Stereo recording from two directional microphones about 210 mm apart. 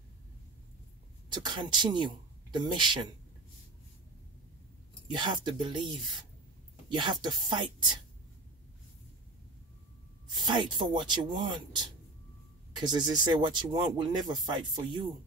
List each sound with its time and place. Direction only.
1.3 s speech: 20° right (ahead or behind)
5.1 s speech: 20° right (ahead or behind)
6.9 s speech: 20° right (ahead or behind)
10.4 s speech: 20° right (ahead or behind)